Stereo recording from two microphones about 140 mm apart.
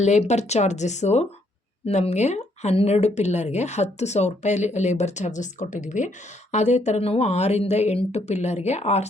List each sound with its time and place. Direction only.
0.0 s speech: 55° left (ahead or behind)